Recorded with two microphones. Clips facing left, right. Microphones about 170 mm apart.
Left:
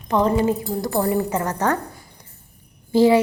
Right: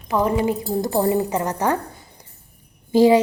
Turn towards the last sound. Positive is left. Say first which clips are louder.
# right 1 dB
turn(degrees=-15)  # may be behind; listen again after turning